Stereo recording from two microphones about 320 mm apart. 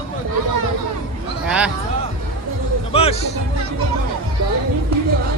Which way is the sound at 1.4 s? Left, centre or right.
Centre.